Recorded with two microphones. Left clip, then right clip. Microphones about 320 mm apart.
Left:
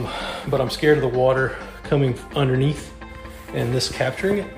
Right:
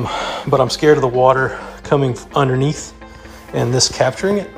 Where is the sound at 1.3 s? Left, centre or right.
Centre.